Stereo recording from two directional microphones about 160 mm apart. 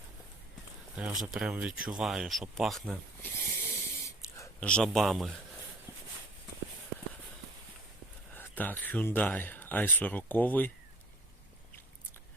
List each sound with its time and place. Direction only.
0.9 s speech: 5° right (ahead or behind)
3.2 s a sound: 15° left (ahead or behind)
4.6 s speech: 5° left (ahead or behind)
8.4 s speech: 10° left (ahead or behind)